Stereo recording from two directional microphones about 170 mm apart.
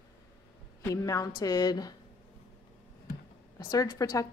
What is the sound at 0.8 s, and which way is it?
A woman's voice, 20° left (ahead or behind).